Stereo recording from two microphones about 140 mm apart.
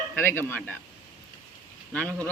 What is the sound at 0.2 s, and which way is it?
Speech, 15° left (ahead or behind).